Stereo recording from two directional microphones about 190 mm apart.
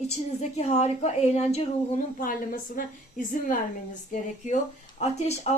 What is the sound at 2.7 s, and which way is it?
Speech, 45° left (ahead or behind).